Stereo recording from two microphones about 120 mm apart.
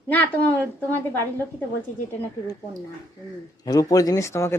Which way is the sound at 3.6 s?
30° left (ahead or behind).